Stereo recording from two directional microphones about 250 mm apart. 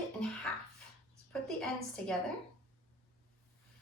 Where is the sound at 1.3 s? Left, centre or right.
Centre.